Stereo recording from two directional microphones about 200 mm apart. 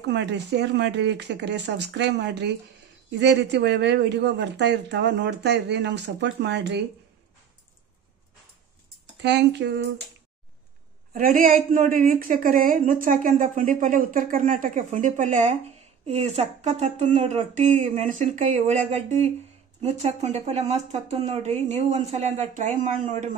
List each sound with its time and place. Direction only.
0.0 s speech: 60° right (ahead or behind)
9.2 s speech: 60° right (ahead or behind)
11.1 s a woman's voice: 45° right (ahead or behind)